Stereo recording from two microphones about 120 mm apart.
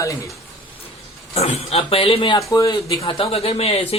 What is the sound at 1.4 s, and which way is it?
Speech, 60° left (ahead or behind).